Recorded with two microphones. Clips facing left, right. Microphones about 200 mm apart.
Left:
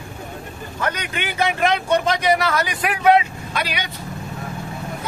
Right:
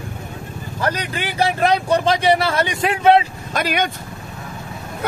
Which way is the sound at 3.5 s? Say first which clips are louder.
Right 6 dB; 50° right (ahead or behind).